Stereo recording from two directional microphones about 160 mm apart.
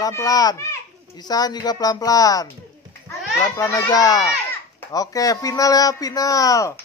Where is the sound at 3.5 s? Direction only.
20° left (ahead or behind).